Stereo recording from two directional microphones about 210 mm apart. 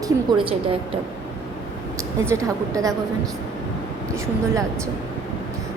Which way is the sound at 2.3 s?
15° right (ahead or behind).